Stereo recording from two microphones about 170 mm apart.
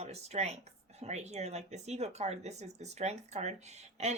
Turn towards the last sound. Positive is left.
turn(degrees=-40)  # may be behind; listen again after turning